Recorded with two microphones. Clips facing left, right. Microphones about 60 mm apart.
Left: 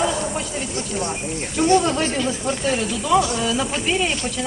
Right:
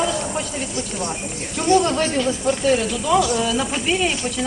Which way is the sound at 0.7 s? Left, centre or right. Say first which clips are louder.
Left 2 dB; left.